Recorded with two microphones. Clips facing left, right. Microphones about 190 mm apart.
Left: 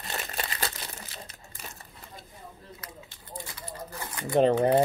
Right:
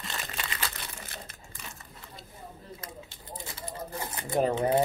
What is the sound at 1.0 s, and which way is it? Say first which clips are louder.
Crumpling: even; 55° right (ahead or behind).